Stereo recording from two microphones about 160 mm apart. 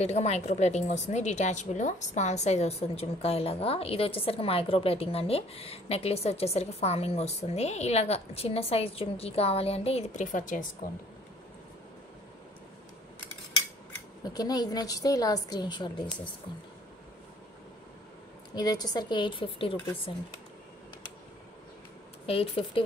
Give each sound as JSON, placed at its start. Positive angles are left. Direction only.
{"t": 0.0, "sound": "a woman's voice", "side_deg": 45}
{"t": 14.2, "sound": "a woman's voice", "side_deg": 25}
{"t": 18.5, "sound": "a woman's voice", "side_deg": 25}
{"t": 22.2, "sound": "a woman's voice", "side_deg": 35}